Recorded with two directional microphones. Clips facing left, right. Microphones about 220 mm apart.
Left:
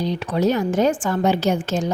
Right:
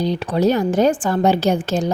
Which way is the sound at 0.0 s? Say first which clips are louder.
Right 3 dB; 35° right (ahead or behind).